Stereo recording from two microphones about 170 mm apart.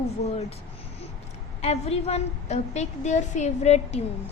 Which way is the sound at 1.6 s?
35° left (ahead or behind).